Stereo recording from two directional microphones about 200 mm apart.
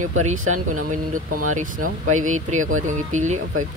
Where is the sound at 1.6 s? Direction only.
40° right (ahead or behind).